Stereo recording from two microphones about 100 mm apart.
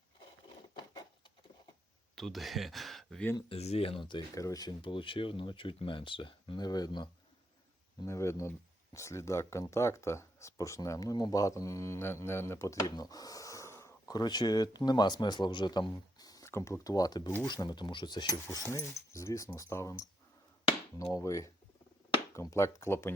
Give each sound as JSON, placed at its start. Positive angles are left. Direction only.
{"t": 2.1, "sound": "speech", "side_deg": 0}
{"t": 3.5, "sound": "speech", "side_deg": 80}
{"t": 4.4, "sound": "speech", "side_deg": 35}
{"t": 4.8, "sound": "speech", "side_deg": 55}
{"t": 6.7, "sound": "speech", "side_deg": 40}
{"t": 8.0, "sound": "speech", "side_deg": 30}
{"t": 14.1, "sound": "speech", "side_deg": 45}
{"t": 16.5, "sound": "speech", "side_deg": 30}
{"t": 18.3, "sound": "speech", "side_deg": 30}